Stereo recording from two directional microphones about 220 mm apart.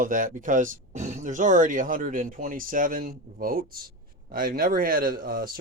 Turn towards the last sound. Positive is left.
turn(degrees=-40)  # may be behind; listen again after turning